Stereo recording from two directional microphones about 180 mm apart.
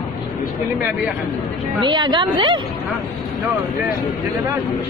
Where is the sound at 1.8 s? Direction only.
25° right (ahead or behind).